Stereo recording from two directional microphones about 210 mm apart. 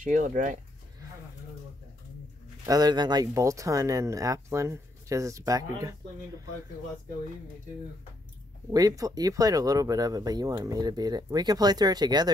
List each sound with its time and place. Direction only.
0.0 s speech: 40° right (ahead or behind)
2.6 s speech: 20° right (ahead or behind)
8.7 s speech: 15° right (ahead or behind)